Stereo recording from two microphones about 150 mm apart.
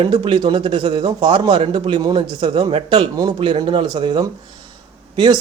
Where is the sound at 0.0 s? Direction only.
35° right (ahead or behind).